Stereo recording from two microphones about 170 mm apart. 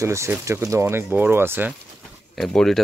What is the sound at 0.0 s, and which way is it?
Speech, 15° right (ahead or behind).